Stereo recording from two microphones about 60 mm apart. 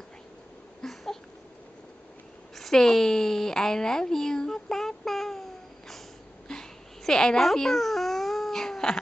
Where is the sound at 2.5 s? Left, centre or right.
Centre.